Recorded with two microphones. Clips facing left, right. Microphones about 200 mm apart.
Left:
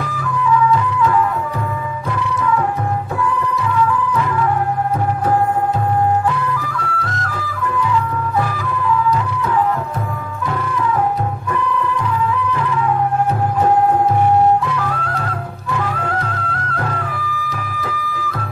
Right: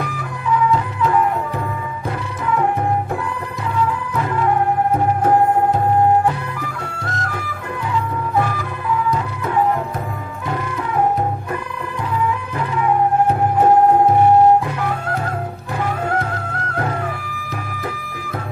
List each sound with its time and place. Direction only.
6.6 s music: 20° right (ahead or behind)